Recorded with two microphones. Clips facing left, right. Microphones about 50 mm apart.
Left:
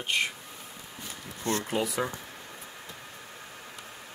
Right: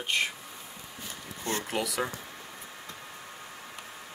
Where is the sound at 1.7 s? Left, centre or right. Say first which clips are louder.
Left 2 dB; right.